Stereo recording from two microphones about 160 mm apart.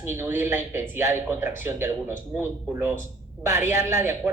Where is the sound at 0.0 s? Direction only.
15° right (ahead or behind).